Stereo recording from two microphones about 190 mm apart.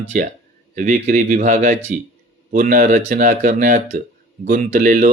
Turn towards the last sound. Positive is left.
turn(degrees=-40)  # may be behind; listen again after turning